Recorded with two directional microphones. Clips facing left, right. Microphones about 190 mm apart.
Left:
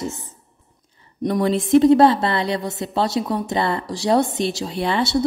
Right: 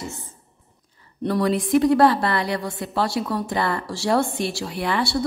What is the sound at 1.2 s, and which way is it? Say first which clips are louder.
A woman's voice: left 2 dB; 20° left (ahead or behind).